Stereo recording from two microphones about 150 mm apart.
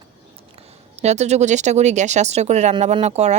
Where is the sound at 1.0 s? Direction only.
50° right (ahead or behind).